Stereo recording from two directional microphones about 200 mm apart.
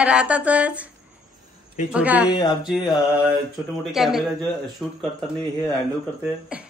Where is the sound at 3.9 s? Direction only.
Centre (ahead or behind).